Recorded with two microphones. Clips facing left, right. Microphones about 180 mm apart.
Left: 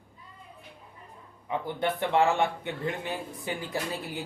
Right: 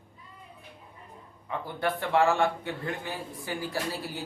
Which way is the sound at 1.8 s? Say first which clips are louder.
Even; 20° left (ahead or behind).